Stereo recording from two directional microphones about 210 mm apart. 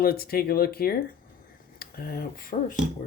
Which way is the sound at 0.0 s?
45° left (ahead or behind).